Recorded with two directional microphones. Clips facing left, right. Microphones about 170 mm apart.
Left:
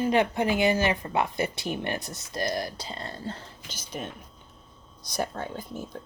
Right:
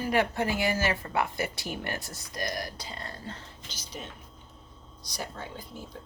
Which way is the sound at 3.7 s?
50° left (ahead or behind).